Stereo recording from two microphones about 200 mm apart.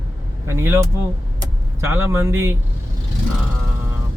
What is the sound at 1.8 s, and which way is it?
Speech, 10° right (ahead or behind).